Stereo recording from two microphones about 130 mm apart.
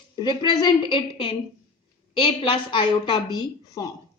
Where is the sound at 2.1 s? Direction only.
40° left (ahead or behind).